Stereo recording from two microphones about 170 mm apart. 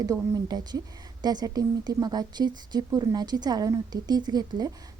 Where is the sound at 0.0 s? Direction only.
25° right (ahead or behind).